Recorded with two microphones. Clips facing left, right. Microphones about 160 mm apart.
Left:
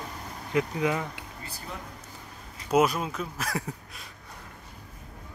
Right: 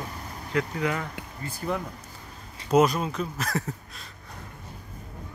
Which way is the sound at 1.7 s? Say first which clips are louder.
Right 12 dB; 60° right (ahead or behind).